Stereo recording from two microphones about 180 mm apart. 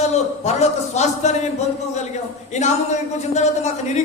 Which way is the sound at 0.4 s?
40° left (ahead or behind).